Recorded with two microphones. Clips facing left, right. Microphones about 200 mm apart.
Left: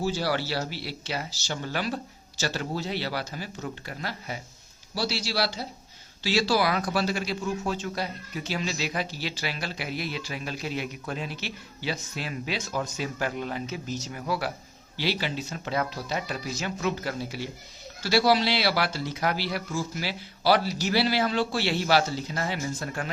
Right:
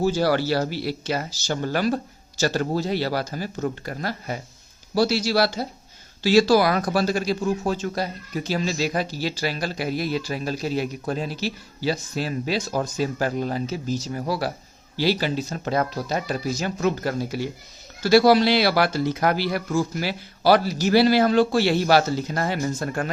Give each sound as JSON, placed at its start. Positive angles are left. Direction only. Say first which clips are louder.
{"t": 0.0, "sound": "speech", "louder": "right 7 dB", "side_deg": -45}